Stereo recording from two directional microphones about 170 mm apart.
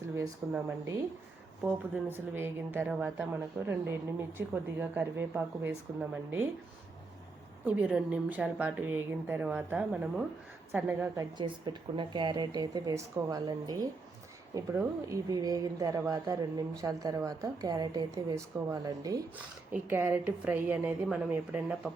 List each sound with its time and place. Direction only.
0.2 s speech: 15° right (ahead or behind)
4.4 s speech: 10° right (ahead or behind)
7.6 s speech: 10° right (ahead or behind)
11.3 s speech: 25° right (ahead or behind)
14.7 s speech: 10° right (ahead or behind)
15.3 s speech: 20° right (ahead or behind)